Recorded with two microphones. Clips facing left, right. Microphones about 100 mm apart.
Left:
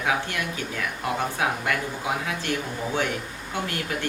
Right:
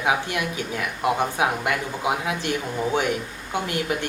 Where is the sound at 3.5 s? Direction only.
15° right (ahead or behind).